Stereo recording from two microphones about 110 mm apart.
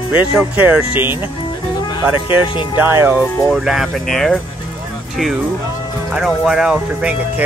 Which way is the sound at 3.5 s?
5° right (ahead or behind).